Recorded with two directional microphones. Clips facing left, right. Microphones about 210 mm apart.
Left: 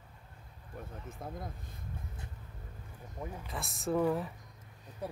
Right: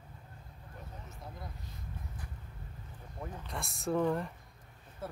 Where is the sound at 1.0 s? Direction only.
50° left (ahead or behind).